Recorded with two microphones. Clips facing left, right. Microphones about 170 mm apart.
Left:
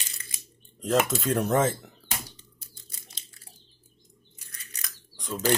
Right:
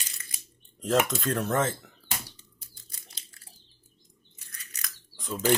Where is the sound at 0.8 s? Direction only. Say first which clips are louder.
Left 1 dB; centre (ahead or behind).